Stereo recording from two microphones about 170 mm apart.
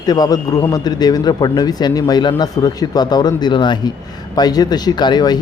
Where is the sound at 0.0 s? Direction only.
20° left (ahead or behind).